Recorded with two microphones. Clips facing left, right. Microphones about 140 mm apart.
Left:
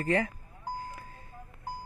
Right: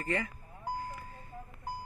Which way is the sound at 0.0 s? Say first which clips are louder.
Left 6 dB; 90° left.